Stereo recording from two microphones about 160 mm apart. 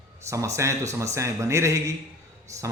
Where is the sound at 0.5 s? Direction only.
20° right (ahead or behind).